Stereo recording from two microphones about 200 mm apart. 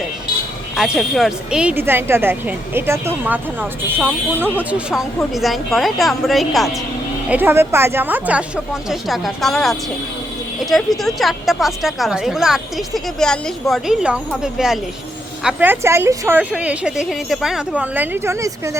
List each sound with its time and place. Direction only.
0.8 s a woman's voice: centre (ahead or behind); by 18.8 s 15° right (ahead or behind)